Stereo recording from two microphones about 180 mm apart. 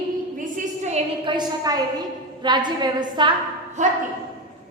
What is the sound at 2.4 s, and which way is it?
Speech, 25° right (ahead or behind).